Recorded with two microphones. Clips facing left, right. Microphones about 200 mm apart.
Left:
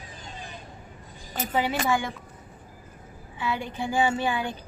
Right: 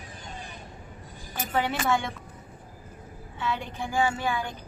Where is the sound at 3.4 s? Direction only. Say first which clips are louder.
Left 2 dB; 10° left (ahead or behind).